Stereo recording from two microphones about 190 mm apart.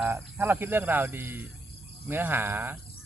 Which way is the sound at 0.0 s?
10° right (ahead or behind).